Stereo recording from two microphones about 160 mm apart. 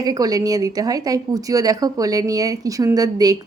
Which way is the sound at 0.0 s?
25° right (ahead or behind).